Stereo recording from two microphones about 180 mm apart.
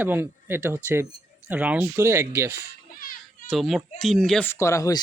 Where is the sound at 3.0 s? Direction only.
55° left (ahead or behind).